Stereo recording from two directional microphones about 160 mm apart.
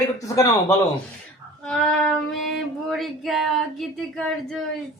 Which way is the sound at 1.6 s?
5° left (ahead or behind).